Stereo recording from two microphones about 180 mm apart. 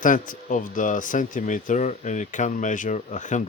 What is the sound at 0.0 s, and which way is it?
Speech, 50° left (ahead or behind).